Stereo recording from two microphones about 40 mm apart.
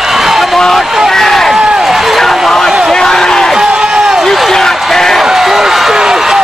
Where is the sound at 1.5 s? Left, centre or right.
Centre.